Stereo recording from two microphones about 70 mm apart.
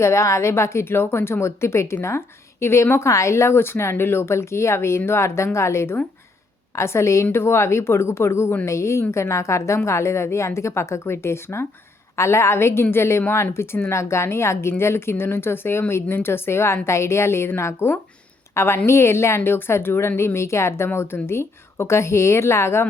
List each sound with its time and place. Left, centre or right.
0.0 s a woman's voice: left